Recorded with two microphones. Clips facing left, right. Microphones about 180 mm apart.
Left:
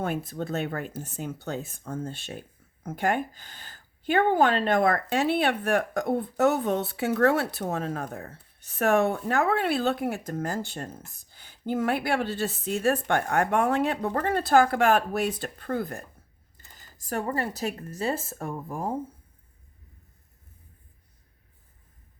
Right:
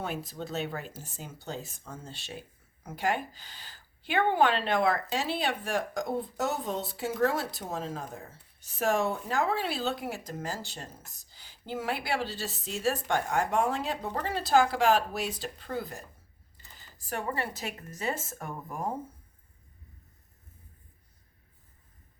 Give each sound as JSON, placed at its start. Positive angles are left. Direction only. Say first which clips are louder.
{"t": 0.0, "sound": "speech", "louder": "left 6 dB", "side_deg": 55}
{"t": 16.6, "sound": "speech", "louder": "left 1 dB", "side_deg": 40}